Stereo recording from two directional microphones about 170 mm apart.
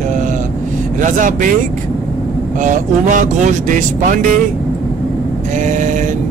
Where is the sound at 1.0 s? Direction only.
50° right (ahead or behind).